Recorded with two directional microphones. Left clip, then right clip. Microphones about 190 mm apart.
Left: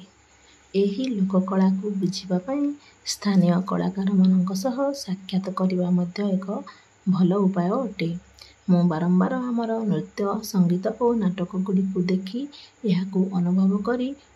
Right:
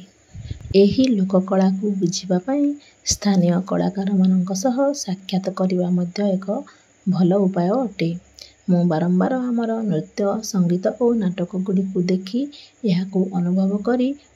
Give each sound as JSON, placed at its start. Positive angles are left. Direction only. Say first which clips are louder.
{"t": 0.7, "sound": "speech", "louder": "right 8 dB", "side_deg": -30}